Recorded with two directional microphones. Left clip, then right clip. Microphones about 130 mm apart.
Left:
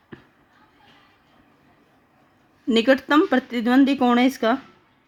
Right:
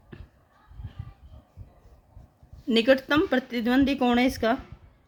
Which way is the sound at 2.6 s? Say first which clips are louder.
Left 3 dB; 30° left (ahead or behind).